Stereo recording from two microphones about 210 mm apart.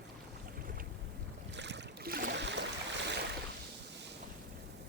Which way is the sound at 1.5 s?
55° right (ahead or behind).